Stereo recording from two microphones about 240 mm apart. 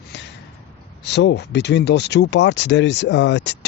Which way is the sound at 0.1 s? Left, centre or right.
Left.